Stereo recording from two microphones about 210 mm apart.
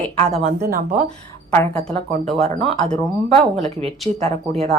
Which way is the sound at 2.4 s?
30° right (ahead or behind).